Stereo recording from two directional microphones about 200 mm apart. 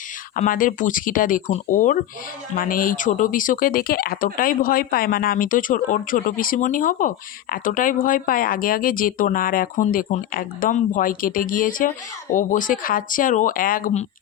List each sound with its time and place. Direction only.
0.3 s speech: 40° left (ahead or behind)